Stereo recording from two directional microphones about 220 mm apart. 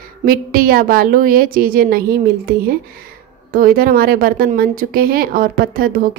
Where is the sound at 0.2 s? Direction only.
40° right (ahead or behind).